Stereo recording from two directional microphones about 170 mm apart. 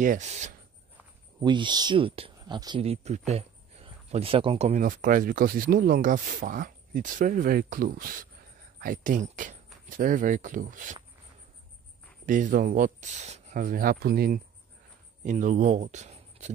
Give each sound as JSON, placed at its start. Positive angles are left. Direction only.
{"t": 0.0, "sound": "speech", "side_deg": -45}
{"t": 1.4, "sound": "speech", "side_deg": -25}
{"t": 12.3, "sound": "speech", "side_deg": -50}
{"t": 15.2, "sound": "speech", "side_deg": -50}